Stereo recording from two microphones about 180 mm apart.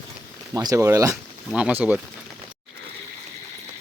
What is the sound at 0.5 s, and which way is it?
Speech, 20° right (ahead or behind).